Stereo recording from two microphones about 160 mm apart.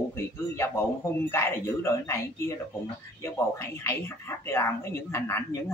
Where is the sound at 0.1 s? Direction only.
15° left (ahead or behind).